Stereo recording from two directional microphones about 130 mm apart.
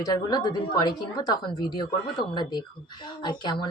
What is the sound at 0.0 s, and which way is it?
A woman's voice, 30° left (ahead or behind).